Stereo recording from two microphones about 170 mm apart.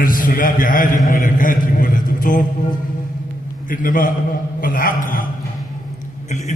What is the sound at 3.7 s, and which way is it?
A man's voice, 50° left (ahead or behind).